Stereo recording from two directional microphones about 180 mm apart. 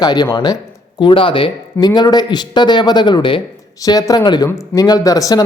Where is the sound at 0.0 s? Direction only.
25° left (ahead or behind).